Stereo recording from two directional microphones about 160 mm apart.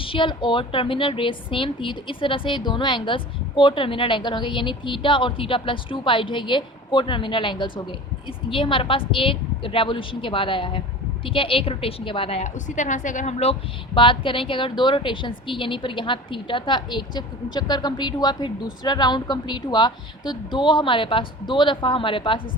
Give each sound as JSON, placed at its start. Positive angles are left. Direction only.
{"t": 0.0, "sound": "a woman's voice", "side_deg": 35}